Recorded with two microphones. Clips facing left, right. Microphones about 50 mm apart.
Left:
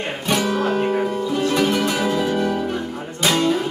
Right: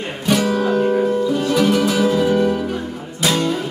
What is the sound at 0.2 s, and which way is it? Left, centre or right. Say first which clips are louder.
Music: right 3 dB; centre.